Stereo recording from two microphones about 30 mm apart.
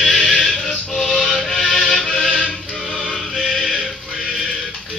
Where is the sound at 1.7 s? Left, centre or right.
Centre.